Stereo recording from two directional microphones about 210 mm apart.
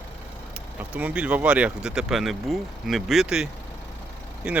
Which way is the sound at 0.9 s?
5° right (ahead or behind).